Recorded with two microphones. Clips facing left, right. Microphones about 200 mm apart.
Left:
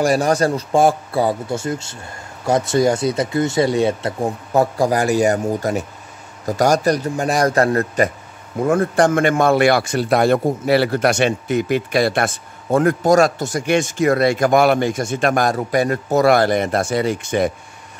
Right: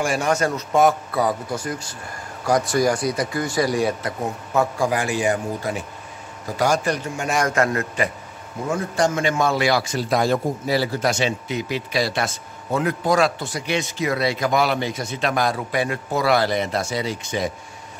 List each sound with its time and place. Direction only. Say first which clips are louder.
0.0 s a man's voice: left 5 dB; 35° left (ahead or behind)
8.6 s a man's voice: left 6 dB; 55° left (ahead or behind)